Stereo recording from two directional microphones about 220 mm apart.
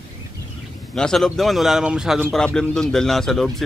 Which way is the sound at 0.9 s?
5° left (ahead or behind).